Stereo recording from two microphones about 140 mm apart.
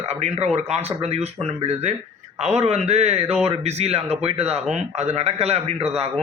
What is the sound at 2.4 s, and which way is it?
Speech, 50° right (ahead or behind).